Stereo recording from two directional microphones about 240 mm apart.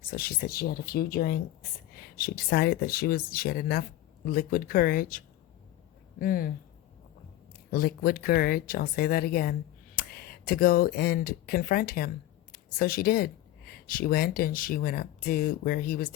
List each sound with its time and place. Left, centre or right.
0.1 s speech: left
7.7 s speech: left